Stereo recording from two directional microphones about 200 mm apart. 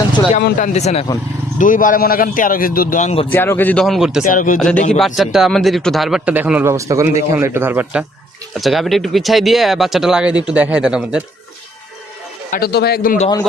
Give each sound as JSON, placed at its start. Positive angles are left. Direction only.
{"t": 0.3, "sound": "a man's voice", "side_deg": 40}
{"t": 3.2, "sound": "speech", "side_deg": 10}
{"t": 4.2, "sound": "a man's voice", "side_deg": 40}
{"t": 4.9, "sound": "speech", "side_deg": 0}
{"t": 12.5, "sound": "a man's voice", "side_deg": 50}